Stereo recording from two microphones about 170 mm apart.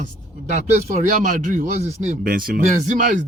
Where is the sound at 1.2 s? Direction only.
50° right (ahead or behind).